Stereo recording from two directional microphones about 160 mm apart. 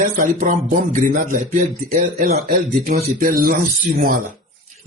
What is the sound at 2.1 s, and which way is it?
Speech, 70° right (ahead or behind).